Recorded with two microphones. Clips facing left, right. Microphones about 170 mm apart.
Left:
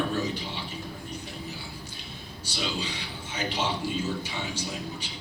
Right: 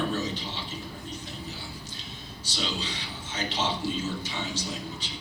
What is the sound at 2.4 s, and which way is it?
A man's voice, 10° left (ahead or behind).